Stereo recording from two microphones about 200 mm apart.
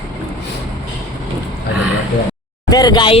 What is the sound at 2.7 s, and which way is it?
Speech, 20° left (ahead or behind).